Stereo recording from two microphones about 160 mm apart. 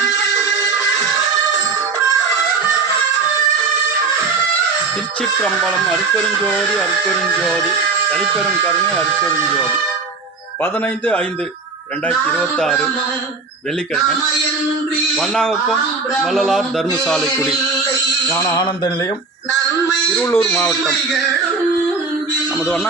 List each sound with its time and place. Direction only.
5.2 s a man's voice: centre (ahead or behind)
8.1 s a man's voice: 5° left (ahead or behind)
10.6 s a man's voice: 10° left (ahead or behind)
15.1 s a man's voice: 5° left (ahead or behind)
18.3 s a man's voice: 20° left (ahead or behind)
20.1 s a man's voice: 15° left (ahead or behind)
22.6 s a man's voice: 5° left (ahead or behind)